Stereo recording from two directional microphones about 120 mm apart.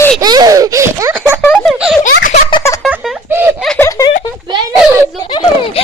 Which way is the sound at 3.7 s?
25° left (ahead or behind).